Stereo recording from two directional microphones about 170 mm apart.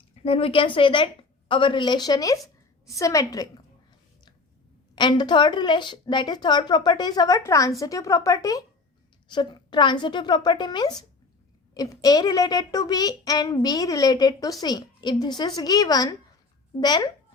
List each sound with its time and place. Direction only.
0.3 s a woman's voice: 35° left (ahead or behind)
4.9 s a woman's voice: 25° left (ahead or behind)